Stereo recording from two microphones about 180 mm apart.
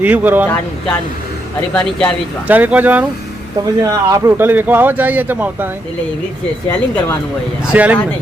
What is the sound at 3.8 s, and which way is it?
Speech, 20° right (ahead or behind).